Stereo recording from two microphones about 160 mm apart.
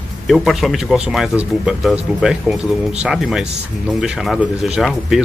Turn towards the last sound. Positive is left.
turn(degrees=0)  # may be behind; listen again after turning